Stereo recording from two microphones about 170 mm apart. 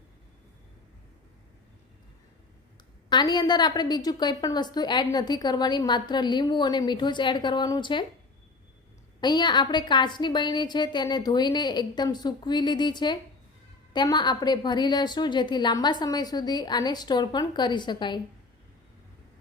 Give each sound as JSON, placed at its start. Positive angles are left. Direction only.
{"t": 3.1, "sound": "a woman's voice", "side_deg": 25}
{"t": 9.2, "sound": "a woman's voice", "side_deg": 25}